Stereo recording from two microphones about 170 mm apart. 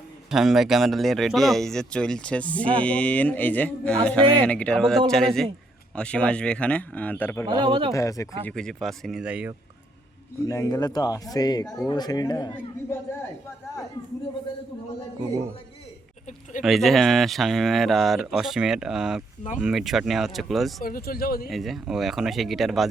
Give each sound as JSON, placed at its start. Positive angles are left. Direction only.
{"t": 0.3, "sound": "speech", "side_deg": 0}
{"t": 7.4, "sound": "speech", "side_deg": -30}
{"t": 7.9, "sound": "speech", "side_deg": 20}
{"t": 8.4, "sound": "speech", "side_deg": 5}
{"t": 10.4, "sound": "speech", "side_deg": 20}
{"t": 16.6, "sound": "speech", "side_deg": 0}
{"t": 20.8, "sound": "speech", "side_deg": 60}
{"t": 21.5, "sound": "speech", "side_deg": 0}